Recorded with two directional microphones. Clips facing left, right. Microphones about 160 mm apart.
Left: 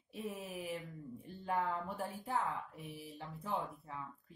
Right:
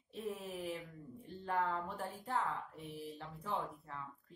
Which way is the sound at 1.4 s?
10° left (ahead or behind).